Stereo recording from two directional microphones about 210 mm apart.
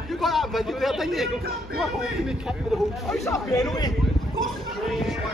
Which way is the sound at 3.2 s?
15° left (ahead or behind).